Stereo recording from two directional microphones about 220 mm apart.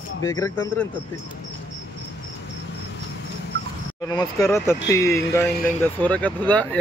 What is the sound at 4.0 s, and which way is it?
A man's voice, 15° left (ahead or behind).